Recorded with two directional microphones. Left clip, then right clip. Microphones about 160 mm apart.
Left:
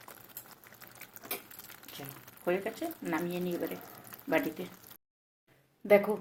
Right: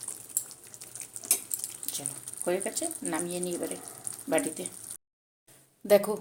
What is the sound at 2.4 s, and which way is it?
Speech, 20° right (ahead or behind).